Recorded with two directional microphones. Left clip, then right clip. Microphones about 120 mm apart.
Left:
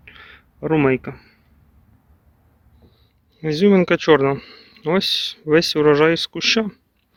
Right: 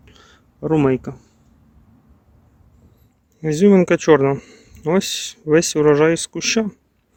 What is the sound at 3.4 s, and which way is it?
Speech, 25° right (ahead or behind).